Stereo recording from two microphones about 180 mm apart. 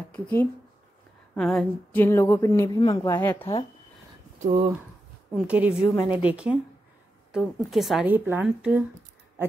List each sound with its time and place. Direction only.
0.1 s a woman's voice: 10° left (ahead or behind)
4.4 s speech: 40° right (ahead or behind)
5.3 s a woman's voice: 5° right (ahead or behind)